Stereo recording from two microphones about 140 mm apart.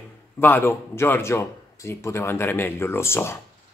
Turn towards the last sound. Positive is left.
turn(degrees=20)  # may be behind; listen again after turning